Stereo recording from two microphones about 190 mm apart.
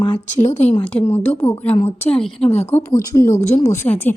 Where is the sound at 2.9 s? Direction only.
45° left (ahead or behind).